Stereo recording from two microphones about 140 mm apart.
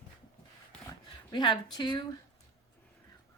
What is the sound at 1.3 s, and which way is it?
Speech, 35° left (ahead or behind).